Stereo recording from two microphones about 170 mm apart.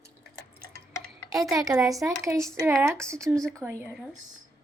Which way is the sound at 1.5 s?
20° right (ahead or behind).